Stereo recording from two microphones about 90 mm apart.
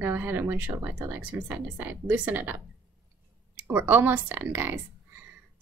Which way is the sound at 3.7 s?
25° right (ahead or behind).